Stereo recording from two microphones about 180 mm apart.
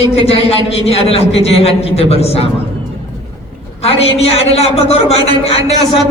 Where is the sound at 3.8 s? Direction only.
35° left (ahead or behind).